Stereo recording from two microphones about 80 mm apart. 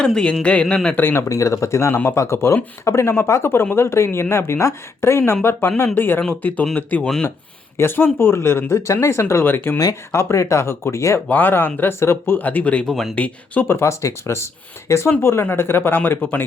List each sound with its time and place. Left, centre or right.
0.0 s speech: centre
0.9 s speech: left
1.3 s speech: left
11.3 s speech: left
13.7 s speech: left